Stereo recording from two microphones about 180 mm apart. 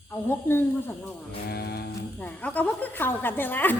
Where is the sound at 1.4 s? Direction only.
60° left (ahead or behind).